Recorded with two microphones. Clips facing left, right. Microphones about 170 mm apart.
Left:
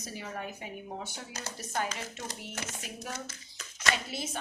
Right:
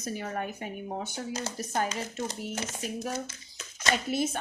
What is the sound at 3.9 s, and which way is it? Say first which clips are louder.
Speech: right 7 dB; 50° right (ahead or behind).